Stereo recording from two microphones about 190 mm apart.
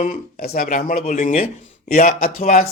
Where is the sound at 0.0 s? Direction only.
50° left (ahead or behind).